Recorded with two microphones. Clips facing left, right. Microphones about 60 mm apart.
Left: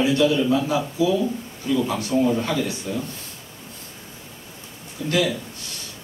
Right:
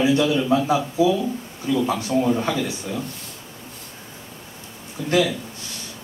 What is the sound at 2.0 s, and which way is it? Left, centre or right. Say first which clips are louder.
Speech: even; centre.